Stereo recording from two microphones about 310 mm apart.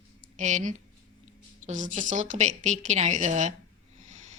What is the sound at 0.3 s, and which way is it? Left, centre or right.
A woman's voice, right.